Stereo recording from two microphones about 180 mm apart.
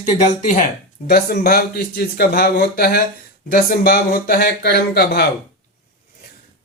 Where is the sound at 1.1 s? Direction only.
60° left (ahead or behind).